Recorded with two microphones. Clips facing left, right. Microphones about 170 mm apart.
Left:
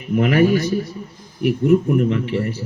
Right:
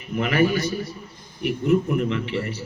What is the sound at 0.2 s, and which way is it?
Speech, 45° left (ahead or behind).